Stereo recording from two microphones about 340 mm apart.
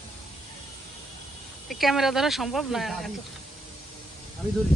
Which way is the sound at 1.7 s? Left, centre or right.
Centre.